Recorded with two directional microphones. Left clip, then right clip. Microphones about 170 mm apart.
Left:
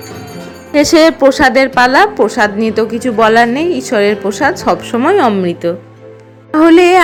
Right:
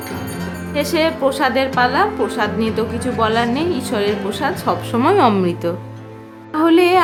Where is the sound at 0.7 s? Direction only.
40° left (ahead or behind).